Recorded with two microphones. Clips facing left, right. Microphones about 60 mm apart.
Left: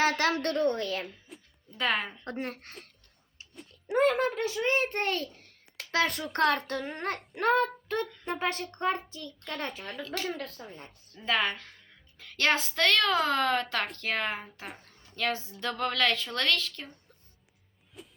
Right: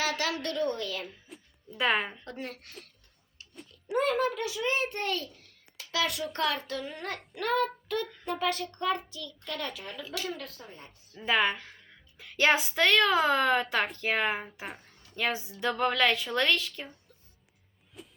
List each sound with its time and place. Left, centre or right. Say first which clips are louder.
0.0 s a woman's voice: left 4 dB; left
1.3 s music: even; centre
1.8 s a woman's voice: right 2 dB; centre
2.2 s a child's voice: left 4 dB; left
3.5 s a sound: left 1 dB; centre
3.9 s a child's voice: left 2 dB; left
5.7 s a sound: left 3 dB; left
6.3 s a child's voice: left 4 dB; left
7.3 s child singing: left 3 dB; left
8.4 s a child's voice: right 1 dB; left
11.1 s a woman's voice: right 2 dB; centre
18.0 s music: even; centre